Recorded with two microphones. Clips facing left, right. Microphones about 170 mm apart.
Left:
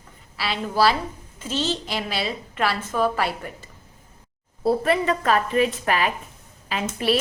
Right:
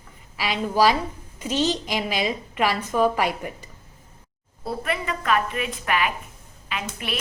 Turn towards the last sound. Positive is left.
turn(degrees=35)  # may be behind; listen again after turning